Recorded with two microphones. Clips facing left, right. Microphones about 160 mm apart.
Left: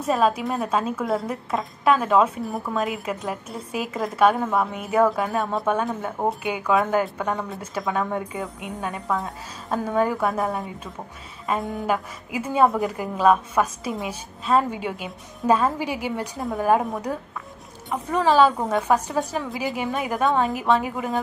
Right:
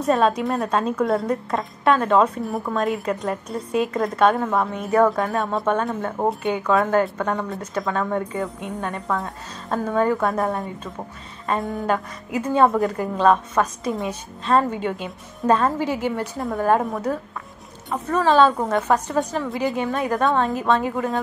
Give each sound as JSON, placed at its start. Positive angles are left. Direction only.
{"t": 0.0, "sound": "a woman's voice", "side_deg": 5}
{"t": 18.1, "sound": "a woman's voice", "side_deg": 15}